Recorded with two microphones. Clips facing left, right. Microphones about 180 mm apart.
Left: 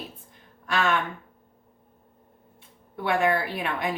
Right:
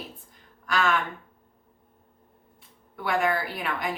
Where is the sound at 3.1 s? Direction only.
25° left (ahead or behind).